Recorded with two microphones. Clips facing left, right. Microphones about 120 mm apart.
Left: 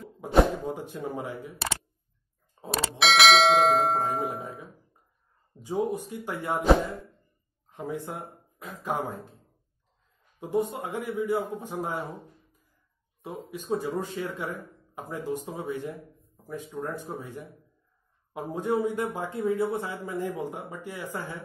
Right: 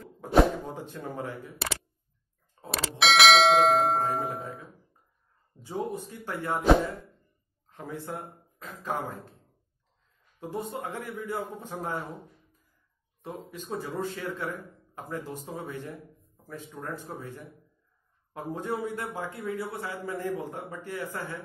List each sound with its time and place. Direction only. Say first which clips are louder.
0.2 s a sound: right 2 dB; 15° left (ahead or behind)
0.7 s speech: left 4 dB; 15° left (ahead or behind)
2.7 s speech: even; centre (ahead or behind)
5.6 s speech: left 5 dB; 15° left (ahead or behind)
7.7 s speech: left 3 dB; 15° left (ahead or behind)
10.4 s speech: left 6 dB; 15° left (ahead or behind)
13.2 s speech: left 2 dB; 15° left (ahead or behind)